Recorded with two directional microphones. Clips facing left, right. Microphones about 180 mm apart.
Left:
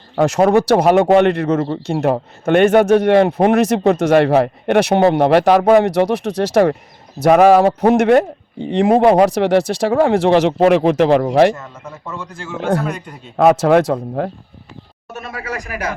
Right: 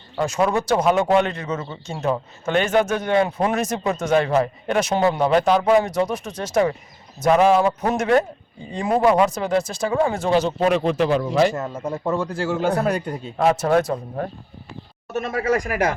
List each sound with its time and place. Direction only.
0.5 s speech: 70° left (ahead or behind)
11.6 s speech: 30° right (ahead or behind)
13.3 s speech: 75° left (ahead or behind); by 14.3 s 90° left
15.1 s speech: 45° right (ahead or behind)